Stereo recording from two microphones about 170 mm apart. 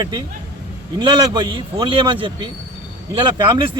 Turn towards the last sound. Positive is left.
turn(degrees=-25)  # may be behind; listen again after turning